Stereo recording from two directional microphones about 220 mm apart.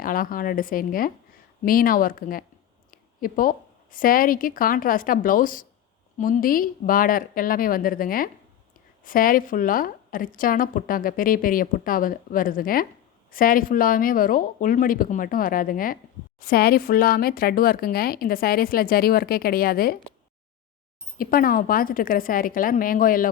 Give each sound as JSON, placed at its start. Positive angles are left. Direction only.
{"t": 0.0, "sound": "a woman's voice", "side_deg": 40}
{"t": 2.9, "sound": "a sound", "side_deg": 40}
{"t": 3.9, "sound": "a woman's voice", "side_deg": 40}
{"t": 21.2, "sound": "a woman's voice", "side_deg": 40}